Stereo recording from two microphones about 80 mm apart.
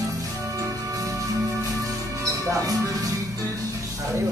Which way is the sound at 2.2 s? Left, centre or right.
Right.